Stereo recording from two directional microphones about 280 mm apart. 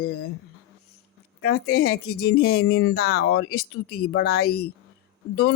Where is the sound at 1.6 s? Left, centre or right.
Left.